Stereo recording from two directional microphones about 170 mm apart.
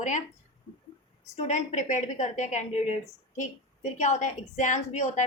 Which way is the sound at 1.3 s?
40° left (ahead or behind).